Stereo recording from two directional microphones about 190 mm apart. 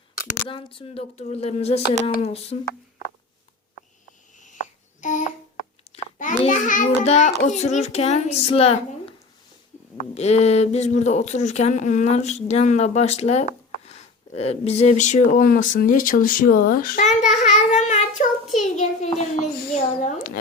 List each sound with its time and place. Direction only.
0.4 s speech: 25° left (ahead or behind)
4.4 s a sound: 40° left (ahead or behind)
7.4 s speech: 35° left (ahead or behind)
10.2 s speech: 35° left (ahead or behind)